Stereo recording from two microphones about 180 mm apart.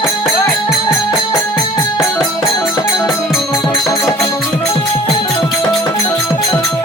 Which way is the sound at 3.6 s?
25° left (ahead or behind).